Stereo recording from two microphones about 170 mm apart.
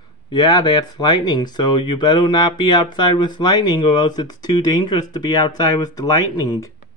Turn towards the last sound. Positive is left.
turn(degrees=20)  # may be behind; listen again after turning